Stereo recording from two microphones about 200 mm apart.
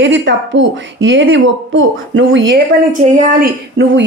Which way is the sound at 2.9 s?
40° right (ahead or behind).